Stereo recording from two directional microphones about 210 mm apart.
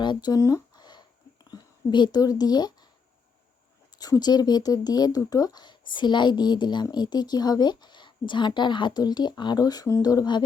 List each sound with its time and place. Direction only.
0.0 s a sound: 20° left (ahead or behind)
1.5 s speech: 20° left (ahead or behind)
3.9 s speech: 20° left (ahead or behind)